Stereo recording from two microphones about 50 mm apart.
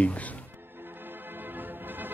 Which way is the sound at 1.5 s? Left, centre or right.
Right.